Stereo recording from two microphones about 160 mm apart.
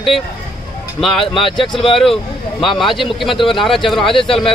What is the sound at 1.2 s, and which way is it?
Speech, 35° left (ahead or behind).